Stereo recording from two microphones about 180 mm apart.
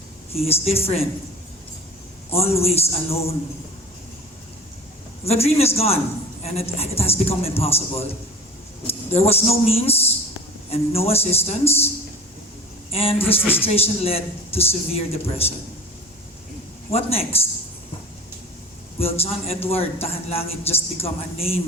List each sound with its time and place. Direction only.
0.3 s speech: 35° left (ahead or behind)
2.3 s speech: 35° left (ahead or behind)
5.2 s a man's voice: 35° left (ahead or behind)
12.9 s speech: 30° left (ahead or behind)
16.9 s speech: 35° left (ahead or behind)
18.9 s speech: 35° left (ahead or behind)